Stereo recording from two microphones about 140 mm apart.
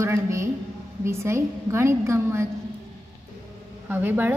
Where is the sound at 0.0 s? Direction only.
20° right (ahead or behind).